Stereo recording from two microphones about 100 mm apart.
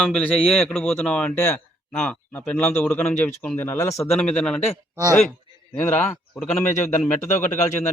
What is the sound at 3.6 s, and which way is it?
Speech, 25° left (ahead or behind).